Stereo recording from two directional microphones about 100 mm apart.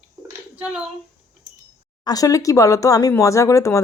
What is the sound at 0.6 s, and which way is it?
Speech, 10° right (ahead or behind).